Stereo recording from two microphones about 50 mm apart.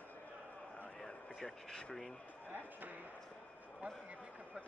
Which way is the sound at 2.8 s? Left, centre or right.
Right.